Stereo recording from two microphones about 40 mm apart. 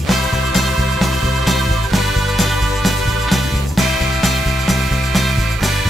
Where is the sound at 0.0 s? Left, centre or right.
Centre.